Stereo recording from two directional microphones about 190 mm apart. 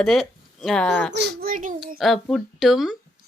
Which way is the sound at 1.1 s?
50° right (ahead or behind).